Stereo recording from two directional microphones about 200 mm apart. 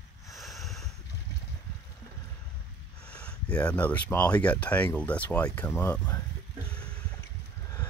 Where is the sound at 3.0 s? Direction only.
5° left (ahead or behind).